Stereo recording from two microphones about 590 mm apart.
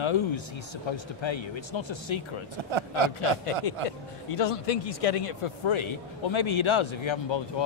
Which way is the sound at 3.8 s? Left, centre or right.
Left.